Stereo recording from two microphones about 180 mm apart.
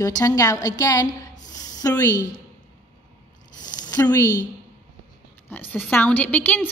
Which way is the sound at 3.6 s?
20° left (ahead or behind).